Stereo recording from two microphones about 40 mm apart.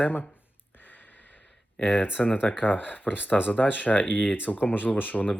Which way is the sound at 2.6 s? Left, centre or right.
Left.